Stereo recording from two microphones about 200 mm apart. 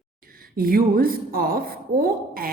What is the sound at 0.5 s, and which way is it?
A woman's voice, 45° right (ahead or behind).